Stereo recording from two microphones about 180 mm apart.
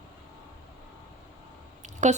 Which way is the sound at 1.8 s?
40° right (ahead or behind).